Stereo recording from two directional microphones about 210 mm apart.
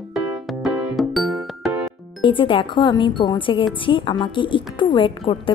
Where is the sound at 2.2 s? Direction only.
25° left (ahead or behind).